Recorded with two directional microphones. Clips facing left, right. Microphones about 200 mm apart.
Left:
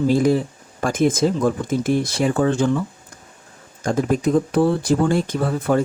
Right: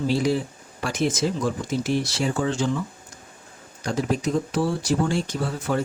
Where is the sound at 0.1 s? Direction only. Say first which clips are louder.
Left 5 dB; 50° left (ahead or behind).